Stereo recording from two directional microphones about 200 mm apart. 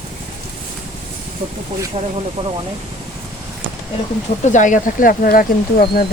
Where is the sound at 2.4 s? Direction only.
20° right (ahead or behind).